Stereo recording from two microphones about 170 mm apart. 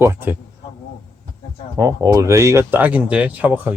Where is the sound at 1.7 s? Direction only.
20° right (ahead or behind).